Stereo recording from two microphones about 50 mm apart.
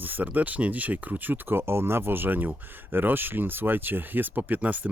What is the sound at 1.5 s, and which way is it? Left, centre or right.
Speech, right.